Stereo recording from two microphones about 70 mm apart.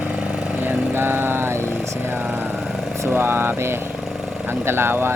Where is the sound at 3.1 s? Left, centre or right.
Right.